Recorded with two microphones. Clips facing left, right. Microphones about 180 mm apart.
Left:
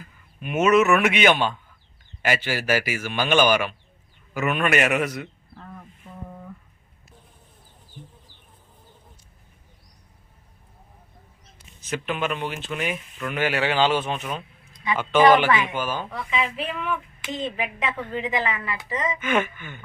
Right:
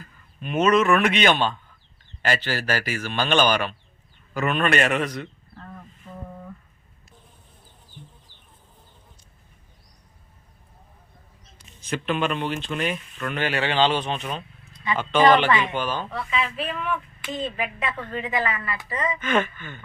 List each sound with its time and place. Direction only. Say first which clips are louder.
0.0 s a man's voice: even; 10° left (ahead or behind)
11.9 s speech: right 2 dB; 10° left (ahead or behind)